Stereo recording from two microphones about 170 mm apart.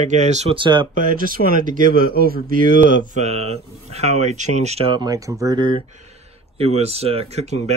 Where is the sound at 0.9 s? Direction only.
50° right (ahead or behind).